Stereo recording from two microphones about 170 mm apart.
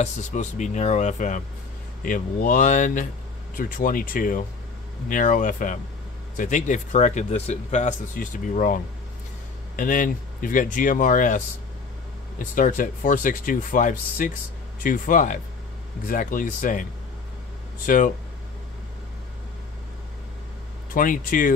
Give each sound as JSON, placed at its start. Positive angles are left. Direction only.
{"t": 0.0, "sound": "speech", "side_deg": 45}
{"t": 17.8, "sound": "speech", "side_deg": 50}
{"t": 20.9, "sound": "speech", "side_deg": 50}